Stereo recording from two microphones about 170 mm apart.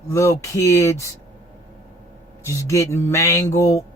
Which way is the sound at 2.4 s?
20° left (ahead or behind).